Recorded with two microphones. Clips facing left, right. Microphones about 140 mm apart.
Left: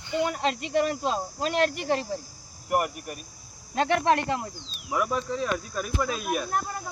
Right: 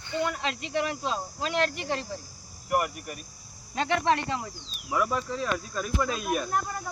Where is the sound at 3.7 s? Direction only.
50° left (ahead or behind).